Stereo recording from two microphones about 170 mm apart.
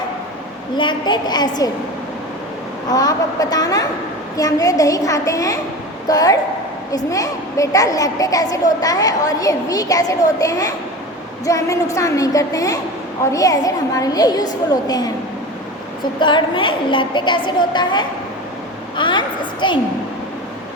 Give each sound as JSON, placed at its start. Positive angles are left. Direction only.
{"t": 0.8, "sound": "a child's voice", "side_deg": 25}
{"t": 2.9, "sound": "a child's voice", "side_deg": 20}
{"t": 16.2, "sound": "a child's voice", "side_deg": 30}
{"t": 18.9, "sound": "a sound", "side_deg": 30}